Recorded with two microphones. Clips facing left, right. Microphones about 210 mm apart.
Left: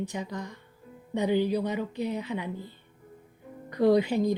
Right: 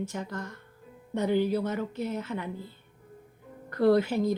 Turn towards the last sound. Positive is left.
turn(degrees=15)  # may be behind; listen again after turning